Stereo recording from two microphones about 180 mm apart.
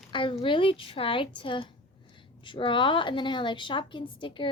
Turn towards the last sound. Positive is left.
turn(degrees=25)  # may be behind; listen again after turning